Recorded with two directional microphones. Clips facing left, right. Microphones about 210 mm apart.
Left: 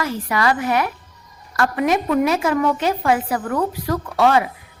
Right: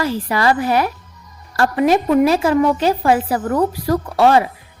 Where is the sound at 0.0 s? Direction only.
30° right (ahead or behind).